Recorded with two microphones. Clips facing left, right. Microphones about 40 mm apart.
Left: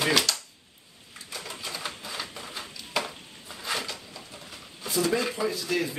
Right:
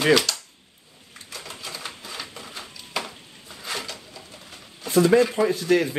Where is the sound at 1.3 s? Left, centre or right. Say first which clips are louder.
Even; centre.